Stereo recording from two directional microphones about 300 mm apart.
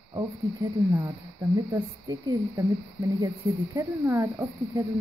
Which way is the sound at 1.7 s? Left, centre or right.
Centre.